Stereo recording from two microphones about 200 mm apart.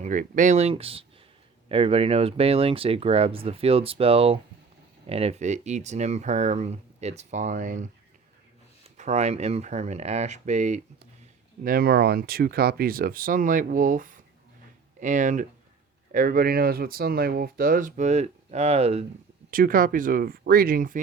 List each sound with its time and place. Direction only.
0.0 s speech: 40° right (ahead or behind)
11.6 s speech: 45° right (ahead or behind); by 19.0 s 30° right (ahead or behind)
19.5 s speech: 45° right (ahead or behind)